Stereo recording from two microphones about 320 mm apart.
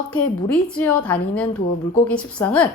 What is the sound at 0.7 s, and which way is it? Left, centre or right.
A woman's voice, centre.